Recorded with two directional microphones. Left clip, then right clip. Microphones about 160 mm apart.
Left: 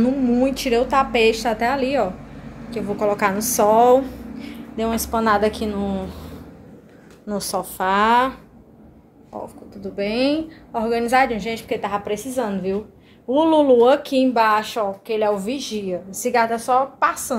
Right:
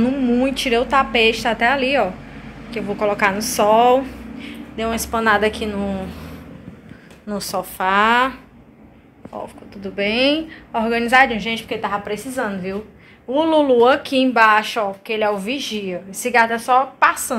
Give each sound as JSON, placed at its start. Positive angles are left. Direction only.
{"t": 0.0, "sound": "a woman's voice", "side_deg": 15}
{"t": 2.7, "sound": "a woman's voice", "side_deg": 20}
{"t": 7.2, "sound": "a woman's voice", "side_deg": 35}
{"t": 9.9, "sound": "a woman's voice", "side_deg": 5}
{"t": 11.3, "sound": "a woman's voice", "side_deg": 25}